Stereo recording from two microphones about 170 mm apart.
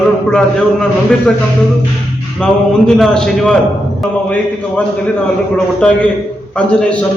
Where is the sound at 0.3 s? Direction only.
5° left (ahead or behind).